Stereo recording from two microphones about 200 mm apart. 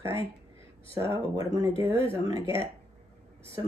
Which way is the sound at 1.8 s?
15° right (ahead or behind).